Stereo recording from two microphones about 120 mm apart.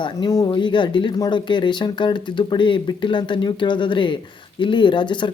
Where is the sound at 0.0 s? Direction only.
30° left (ahead or behind).